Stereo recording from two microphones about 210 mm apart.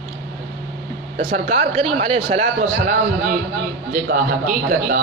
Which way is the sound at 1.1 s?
35° right (ahead or behind).